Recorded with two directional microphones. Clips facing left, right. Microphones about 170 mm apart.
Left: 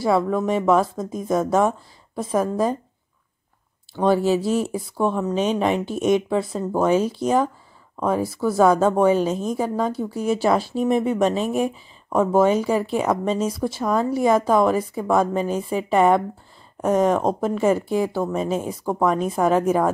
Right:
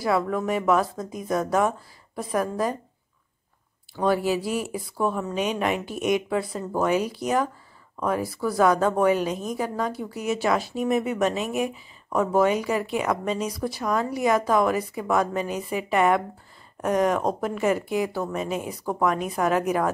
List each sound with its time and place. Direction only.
0.4 s speech: 25° left (ahead or behind)
4.2 s speech: 25° left (ahead or behind)